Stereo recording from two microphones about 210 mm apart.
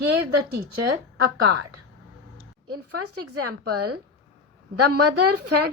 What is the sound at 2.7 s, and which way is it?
Speech, 90° right.